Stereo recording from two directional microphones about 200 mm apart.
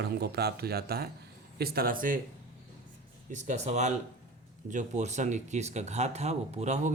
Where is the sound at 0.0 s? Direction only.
55° right (ahead or behind).